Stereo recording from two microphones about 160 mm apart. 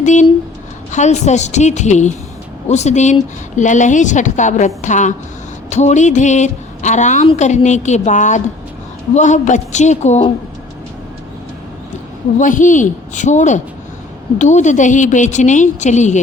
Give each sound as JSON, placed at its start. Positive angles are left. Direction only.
{"t": 0.0, "sound": "speech", "side_deg": 50}
{"t": 12.4, "sound": "speech", "side_deg": 55}